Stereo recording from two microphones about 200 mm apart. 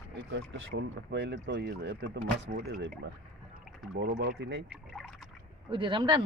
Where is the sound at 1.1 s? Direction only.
60° right (ahead or behind).